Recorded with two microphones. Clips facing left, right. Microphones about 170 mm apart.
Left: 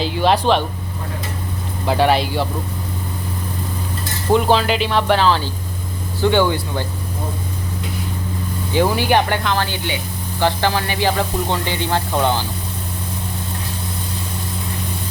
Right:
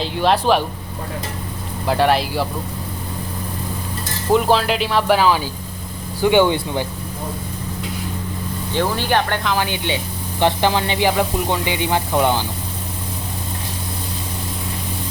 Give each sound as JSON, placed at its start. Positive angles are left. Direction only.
{"t": 0.0, "sound": "speech", "side_deg": 0}
{"t": 1.9, "sound": "speech", "side_deg": 0}
{"t": 4.3, "sound": "speech", "side_deg": 0}
{"t": 8.7, "sound": "speech", "side_deg": 10}
{"t": 9.6, "sound": "speech", "side_deg": -20}